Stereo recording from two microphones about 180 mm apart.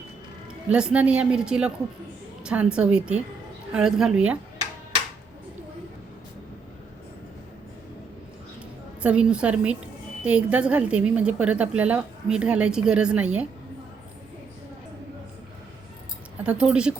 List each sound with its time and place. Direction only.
0.7 s a woman's voice: 5° right (ahead or behind)
9.0 s a woman's voice: 5° right (ahead or behind)
16.4 s a woman's voice: 5° right (ahead or behind)